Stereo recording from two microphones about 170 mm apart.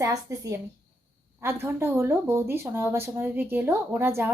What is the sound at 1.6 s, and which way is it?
Speech, 15° right (ahead or behind).